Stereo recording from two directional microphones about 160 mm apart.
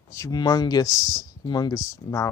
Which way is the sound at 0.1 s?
20° left (ahead or behind).